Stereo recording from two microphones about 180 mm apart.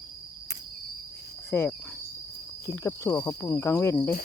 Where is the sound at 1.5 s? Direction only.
10° left (ahead or behind).